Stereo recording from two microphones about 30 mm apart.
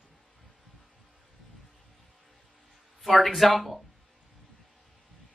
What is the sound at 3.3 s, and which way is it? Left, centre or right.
Speech, centre.